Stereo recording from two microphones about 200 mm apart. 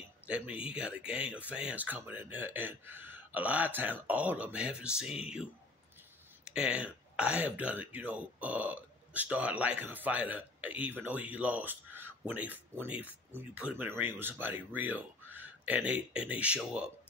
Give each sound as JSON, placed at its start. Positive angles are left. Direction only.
{"t": 0.3, "sound": "speech", "side_deg": -5}
{"t": 6.5, "sound": "speech", "side_deg": -5}